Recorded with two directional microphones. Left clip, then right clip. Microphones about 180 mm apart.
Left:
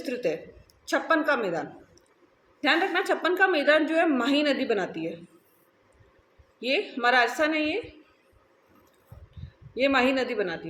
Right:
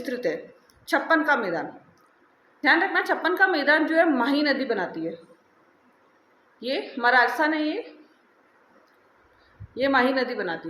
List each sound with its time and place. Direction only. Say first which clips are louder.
0.0 s a woman's voice: right 1 dB; 15° left (ahead or behind)
6.6 s a woman's voice: even; 20° left (ahead or behind)
9.7 s a woman's voice: right 1 dB; 20° left (ahead or behind)